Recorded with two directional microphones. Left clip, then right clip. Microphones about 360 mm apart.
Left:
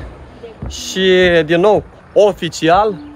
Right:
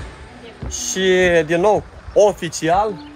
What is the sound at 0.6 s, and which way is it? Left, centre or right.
A man's voice, centre.